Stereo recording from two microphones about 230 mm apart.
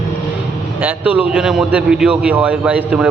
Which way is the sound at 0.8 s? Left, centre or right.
Centre.